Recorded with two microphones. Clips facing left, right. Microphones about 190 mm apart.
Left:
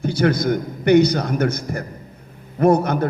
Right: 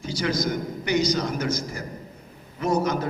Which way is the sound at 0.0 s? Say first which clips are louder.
Left 7 dB; 60° left (ahead or behind).